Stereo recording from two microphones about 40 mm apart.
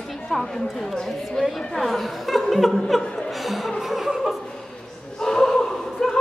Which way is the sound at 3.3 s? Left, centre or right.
Centre.